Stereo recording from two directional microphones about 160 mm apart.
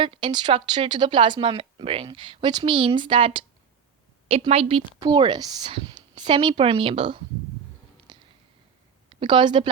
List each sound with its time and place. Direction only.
0.0 s a woman's voice: 30° right (ahead or behind)
4.9 s a woman's voice: 25° right (ahead or behind)
8.1 s a sound: 30° right (ahead or behind)
9.0 s speech: 30° right (ahead or behind)